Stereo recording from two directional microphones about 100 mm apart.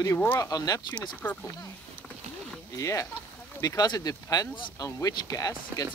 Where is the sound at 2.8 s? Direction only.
30° left (ahead or behind).